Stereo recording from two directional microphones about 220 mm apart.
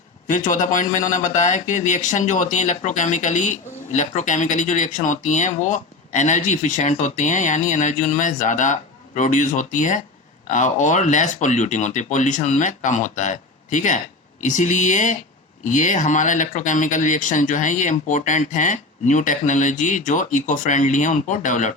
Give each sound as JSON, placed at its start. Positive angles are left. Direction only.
{"t": 0.3, "sound": "a man's voice", "side_deg": 35}